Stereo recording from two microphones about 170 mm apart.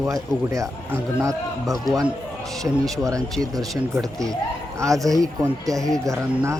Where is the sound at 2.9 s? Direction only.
20° right (ahead or behind).